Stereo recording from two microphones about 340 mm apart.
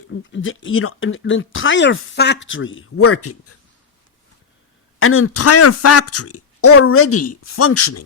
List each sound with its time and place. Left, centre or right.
0.1 s speech: left
4.9 s speech: left